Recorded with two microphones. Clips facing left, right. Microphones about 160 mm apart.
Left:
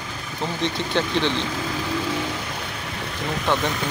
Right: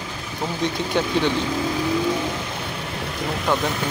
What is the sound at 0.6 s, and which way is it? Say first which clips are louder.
Speech: right 2 dB; 10° right (ahead or behind).